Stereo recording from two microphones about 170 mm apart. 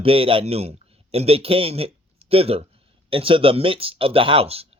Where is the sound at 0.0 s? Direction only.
35° right (ahead or behind).